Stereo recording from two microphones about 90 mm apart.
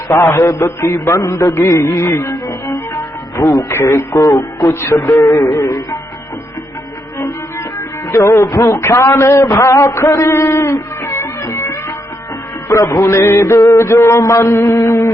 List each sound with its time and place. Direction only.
0.1 s music: 30° left (ahead or behind)
8.1 s a sound: 35° left (ahead or behind)
12.6 s music: 35° left (ahead or behind)